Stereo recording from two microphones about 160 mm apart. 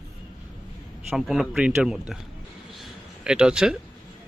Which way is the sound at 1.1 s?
Centre (ahead or behind).